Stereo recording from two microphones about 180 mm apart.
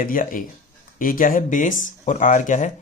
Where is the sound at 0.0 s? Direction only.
50° left (ahead or behind).